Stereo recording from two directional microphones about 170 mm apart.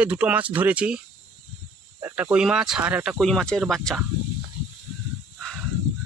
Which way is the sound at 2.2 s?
5° right (ahead or behind).